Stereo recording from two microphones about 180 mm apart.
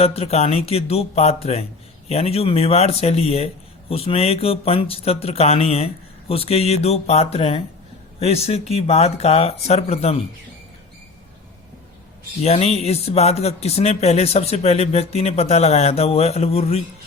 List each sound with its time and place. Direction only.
0.0 s speech: 35° left (ahead or behind)
12.4 s speech: 35° left (ahead or behind)